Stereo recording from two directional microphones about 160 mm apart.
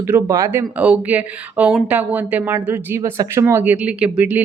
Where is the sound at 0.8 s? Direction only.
10° right (ahead or behind).